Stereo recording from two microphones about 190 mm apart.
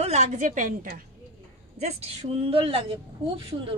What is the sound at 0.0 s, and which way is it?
A woman's voice, 35° right (ahead or behind).